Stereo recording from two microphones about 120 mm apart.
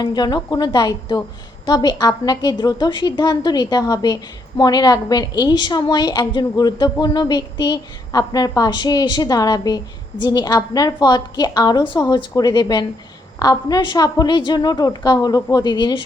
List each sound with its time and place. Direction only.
0.0 s a woman's voice: 35° left (ahead or behind)